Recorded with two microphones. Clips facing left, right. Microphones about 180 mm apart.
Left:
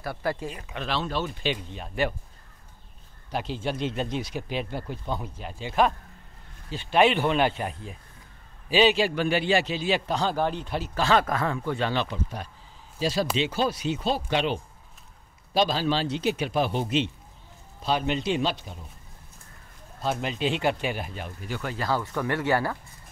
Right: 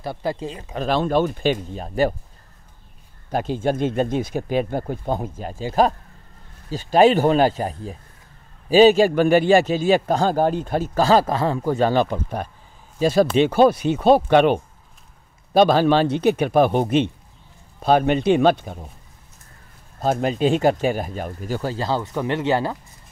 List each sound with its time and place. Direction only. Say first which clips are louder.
0.0 s speech: right 4 dB; 20° right (ahead or behind)
0.7 s a man's voice: right 10 dB; 45° right (ahead or behind)
3.3 s a man's voice: right 8 dB; 50° right (ahead or behind)
20.0 s speech: right 8 dB; 45° right (ahead or behind); by 22.8 s 20° right (ahead or behind)